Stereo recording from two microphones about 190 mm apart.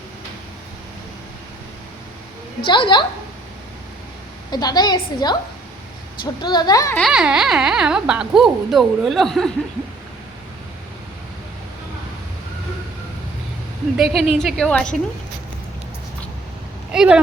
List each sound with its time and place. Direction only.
2.6 s a woman's voice: 25° left (ahead or behind)
4.5 s a woman's voice: 20° left (ahead or behind)
6.4 s a woman's voice: 20° left (ahead or behind)
7.0 s speech: 5° right (ahead or behind)
13.9 s a woman's voice: centre (ahead or behind)
16.9 s speech: 5° right (ahead or behind)